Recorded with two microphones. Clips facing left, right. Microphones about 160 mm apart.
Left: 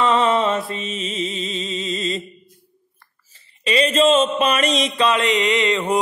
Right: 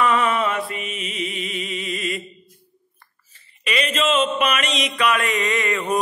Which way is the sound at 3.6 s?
30° left (ahead or behind).